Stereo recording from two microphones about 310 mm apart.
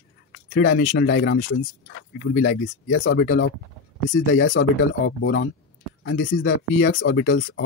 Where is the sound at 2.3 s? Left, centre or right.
Left.